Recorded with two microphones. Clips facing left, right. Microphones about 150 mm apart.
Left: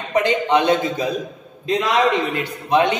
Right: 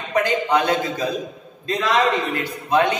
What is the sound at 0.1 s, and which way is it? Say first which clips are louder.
A man's voice: left 2 dB; 20° left (ahead or behind).